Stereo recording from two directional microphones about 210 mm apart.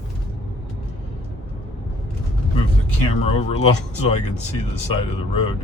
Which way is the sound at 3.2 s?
30° left (ahead or behind).